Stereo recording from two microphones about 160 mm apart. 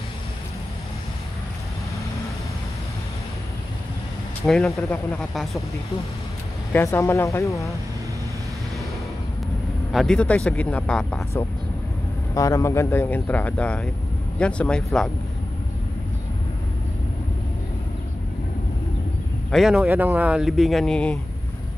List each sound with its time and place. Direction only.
4.6 s speech: 15° left (ahead or behind)
6.7 s speech: 15° left (ahead or behind)
9.9 s speech: 5° left (ahead or behind)
12.4 s speech: 20° left (ahead or behind); by 15.0 s 5° left (ahead or behind)
19.5 s speech: 5° right (ahead or behind)